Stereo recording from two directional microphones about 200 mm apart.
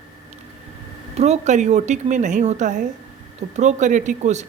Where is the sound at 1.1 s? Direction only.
35° right (ahead or behind).